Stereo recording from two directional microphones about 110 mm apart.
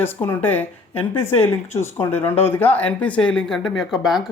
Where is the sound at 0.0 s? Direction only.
20° left (ahead or behind).